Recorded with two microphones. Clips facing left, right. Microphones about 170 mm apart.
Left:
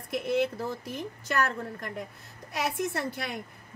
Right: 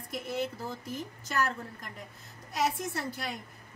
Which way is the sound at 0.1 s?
65° left (ahead or behind).